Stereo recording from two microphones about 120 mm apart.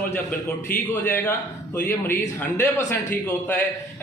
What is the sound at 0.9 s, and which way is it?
A man's voice, 15° left (ahead or behind).